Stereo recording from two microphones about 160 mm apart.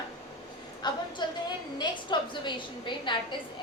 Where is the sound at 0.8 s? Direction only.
25° left (ahead or behind).